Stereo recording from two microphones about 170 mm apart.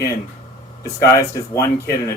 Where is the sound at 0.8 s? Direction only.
20° left (ahead or behind).